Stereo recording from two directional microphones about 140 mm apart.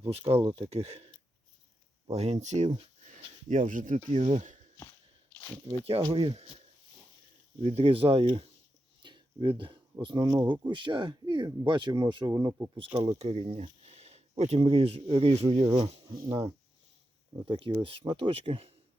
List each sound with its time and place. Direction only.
0.0 s speech: 45° right (ahead or behind)
3.7 s speech: 70° right (ahead or behind)
5.6 s speech: 45° right (ahead or behind)
7.6 s speech: 45° right (ahead or behind)
9.0 s a sound: 35° right (ahead or behind)
10.0 s speech: 35° right (ahead or behind)
13.1 s a sound: 50° right (ahead or behind)
14.6 s speech: 45° right (ahead or behind)
17.4 s speech: 40° right (ahead or behind)